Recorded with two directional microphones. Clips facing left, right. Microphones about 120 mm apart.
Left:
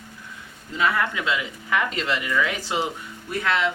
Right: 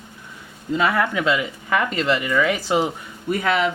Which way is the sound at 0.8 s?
45° right (ahead or behind).